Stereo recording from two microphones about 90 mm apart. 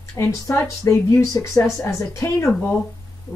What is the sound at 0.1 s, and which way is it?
Speech, 30° left (ahead or behind).